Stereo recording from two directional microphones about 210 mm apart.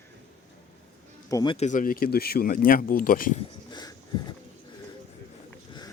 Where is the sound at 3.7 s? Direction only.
20° left (ahead or behind).